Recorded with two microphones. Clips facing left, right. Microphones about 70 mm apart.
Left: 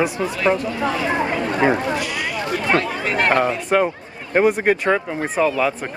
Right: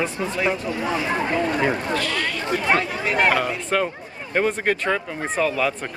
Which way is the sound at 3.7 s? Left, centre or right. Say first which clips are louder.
Left 4 dB; centre.